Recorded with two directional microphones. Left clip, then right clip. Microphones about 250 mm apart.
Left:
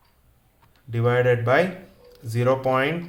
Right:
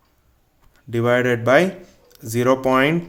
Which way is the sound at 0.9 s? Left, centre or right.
Right.